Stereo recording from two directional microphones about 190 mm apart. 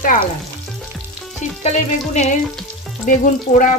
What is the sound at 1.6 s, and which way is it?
Music, 35° left (ahead or behind).